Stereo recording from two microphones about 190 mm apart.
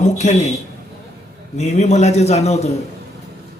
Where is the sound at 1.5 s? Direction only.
35° left (ahead or behind).